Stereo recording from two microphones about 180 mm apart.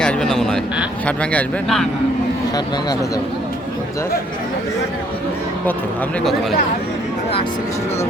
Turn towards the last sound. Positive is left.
turn(degrees=0)  # may be behind; listen again after turning